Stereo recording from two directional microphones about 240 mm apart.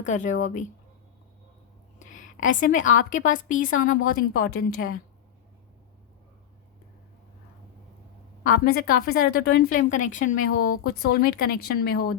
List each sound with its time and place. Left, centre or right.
0.0 s a woman's voice: left
2.0 s a sound: left
3.0 s a woman's voice: left
8.4 s a woman's voice: left